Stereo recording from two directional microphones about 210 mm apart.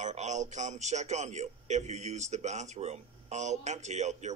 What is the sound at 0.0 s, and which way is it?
Speech, 35° right (ahead or behind).